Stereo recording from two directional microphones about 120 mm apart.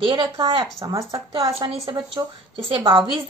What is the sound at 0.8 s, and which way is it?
Speech, 30° right (ahead or behind).